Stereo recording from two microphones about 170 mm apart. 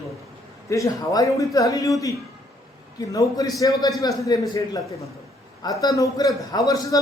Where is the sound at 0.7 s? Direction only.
20° left (ahead or behind).